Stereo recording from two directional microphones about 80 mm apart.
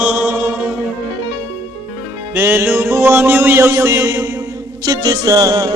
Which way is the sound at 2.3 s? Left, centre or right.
Right.